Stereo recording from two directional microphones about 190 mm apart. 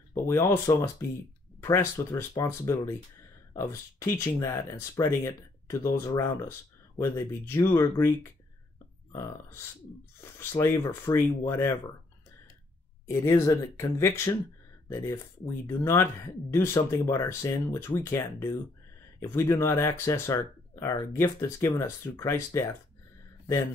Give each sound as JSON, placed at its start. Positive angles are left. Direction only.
{"t": 0.1, "sound": "speech", "side_deg": 15}
{"t": 10.4, "sound": "speech", "side_deg": 15}
{"t": 13.1, "sound": "speech", "side_deg": 15}